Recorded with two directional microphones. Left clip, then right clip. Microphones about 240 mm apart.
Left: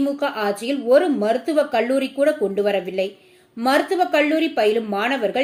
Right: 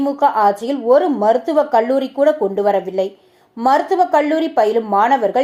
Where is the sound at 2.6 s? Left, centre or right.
Right.